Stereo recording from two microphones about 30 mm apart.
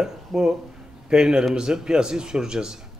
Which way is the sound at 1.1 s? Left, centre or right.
Right.